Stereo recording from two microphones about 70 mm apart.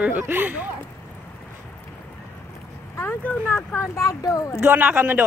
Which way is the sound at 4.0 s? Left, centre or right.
Left.